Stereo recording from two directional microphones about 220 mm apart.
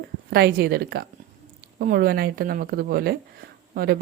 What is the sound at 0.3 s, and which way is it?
Speech, 45° right (ahead or behind).